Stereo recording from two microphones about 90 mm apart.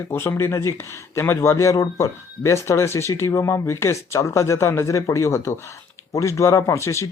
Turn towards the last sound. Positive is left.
turn(degrees=35)  # may be behind; listen again after turning